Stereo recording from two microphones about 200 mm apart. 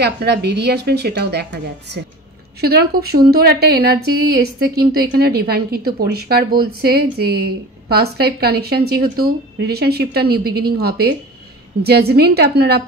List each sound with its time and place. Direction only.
0.0 s a woman's voice: 55° right (ahead or behind)